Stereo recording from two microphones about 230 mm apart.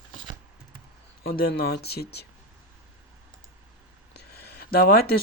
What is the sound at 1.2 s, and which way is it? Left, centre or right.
Speech, left.